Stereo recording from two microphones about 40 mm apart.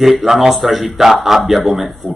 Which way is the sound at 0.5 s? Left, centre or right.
Centre.